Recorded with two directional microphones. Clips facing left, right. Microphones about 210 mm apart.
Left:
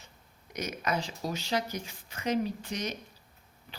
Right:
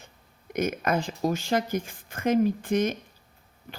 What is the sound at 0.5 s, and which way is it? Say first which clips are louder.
Speech: right 7 dB; 50° right (ahead or behind).